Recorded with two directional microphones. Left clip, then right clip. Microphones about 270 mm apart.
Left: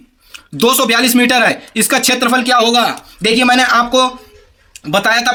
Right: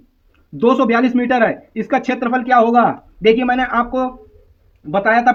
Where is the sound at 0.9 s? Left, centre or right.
Centre.